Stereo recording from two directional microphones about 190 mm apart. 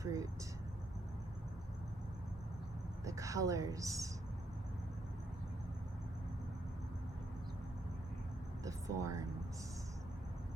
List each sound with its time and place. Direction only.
0.0 s vehicle: 15° right (ahead or behind)
3.0 s speech: 15° right (ahead or behind)
8.6 s a sound: 15° right (ahead or behind)